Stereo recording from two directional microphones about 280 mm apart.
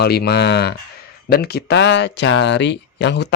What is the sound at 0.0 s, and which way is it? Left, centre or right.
Speech, left.